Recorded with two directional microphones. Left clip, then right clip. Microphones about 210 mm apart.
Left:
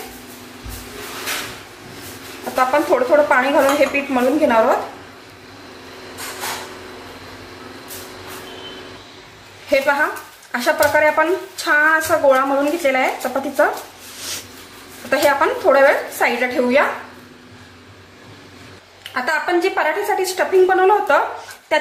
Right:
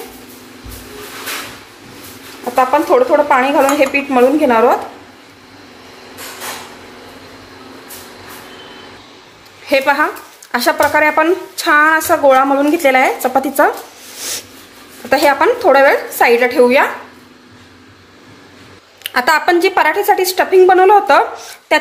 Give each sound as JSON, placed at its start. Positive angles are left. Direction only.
{"t": 2.5, "sound": "speech", "side_deg": -30}
{"t": 9.7, "sound": "speech", "side_deg": -45}
{"t": 15.0, "sound": "speech", "side_deg": -40}
{"t": 19.1, "sound": "speech", "side_deg": -55}